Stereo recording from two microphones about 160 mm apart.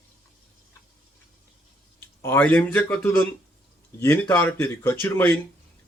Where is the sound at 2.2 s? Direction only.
10° left (ahead or behind).